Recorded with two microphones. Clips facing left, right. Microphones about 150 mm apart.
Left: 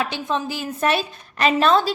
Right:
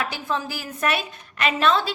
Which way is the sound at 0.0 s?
20° left (ahead or behind).